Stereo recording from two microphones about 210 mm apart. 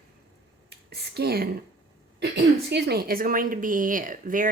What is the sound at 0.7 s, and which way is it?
A woman's voice, 50° right (ahead or behind).